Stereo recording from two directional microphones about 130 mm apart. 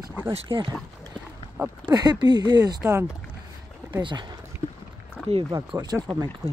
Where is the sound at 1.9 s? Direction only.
30° right (ahead or behind).